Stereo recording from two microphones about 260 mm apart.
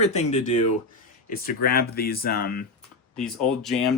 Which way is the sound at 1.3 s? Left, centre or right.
Left.